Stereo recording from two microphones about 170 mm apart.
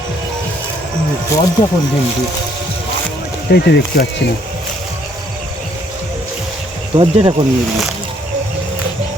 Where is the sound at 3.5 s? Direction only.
75° left (ahead or behind).